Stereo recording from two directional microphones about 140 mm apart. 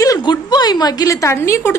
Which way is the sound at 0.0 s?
30° left (ahead or behind).